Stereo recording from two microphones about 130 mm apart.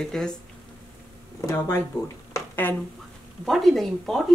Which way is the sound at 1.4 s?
20° left (ahead or behind).